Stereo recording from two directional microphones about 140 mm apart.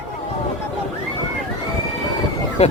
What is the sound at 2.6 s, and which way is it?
Speech, 50° left (ahead or behind).